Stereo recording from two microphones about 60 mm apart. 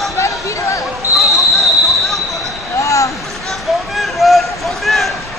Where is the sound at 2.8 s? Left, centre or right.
Left.